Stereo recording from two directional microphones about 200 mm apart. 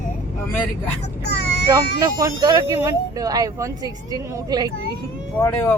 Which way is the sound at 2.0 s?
20° right (ahead or behind).